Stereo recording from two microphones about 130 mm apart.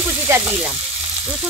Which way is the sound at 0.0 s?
15° right (ahead or behind).